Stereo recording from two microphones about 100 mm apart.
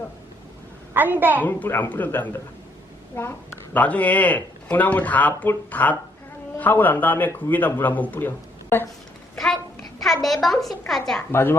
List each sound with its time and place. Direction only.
0.9 s a woman's voice: 20° right (ahead or behind)
1.5 s speech: 20° left (ahead or behind)
9.3 s a sound: 5° left (ahead or behind)
10.2 s a woman's voice: centre (ahead or behind)
11.3 s speech: 25° left (ahead or behind)